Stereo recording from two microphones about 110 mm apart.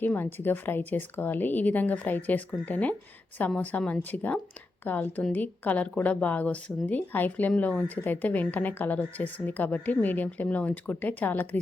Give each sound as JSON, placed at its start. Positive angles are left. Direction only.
{"t": 0.0, "sound": "speech", "side_deg": 20}